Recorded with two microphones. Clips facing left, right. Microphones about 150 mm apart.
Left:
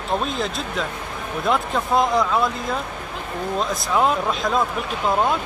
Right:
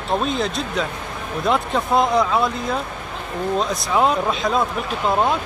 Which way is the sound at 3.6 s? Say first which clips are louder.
Right 1 dB; centre (ahead or behind).